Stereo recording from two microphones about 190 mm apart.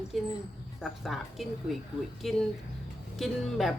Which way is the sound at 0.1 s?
Centre (ahead or behind).